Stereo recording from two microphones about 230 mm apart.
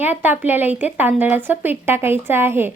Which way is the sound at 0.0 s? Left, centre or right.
Centre.